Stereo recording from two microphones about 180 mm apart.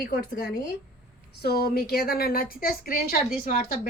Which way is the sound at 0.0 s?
50° left (ahead or behind).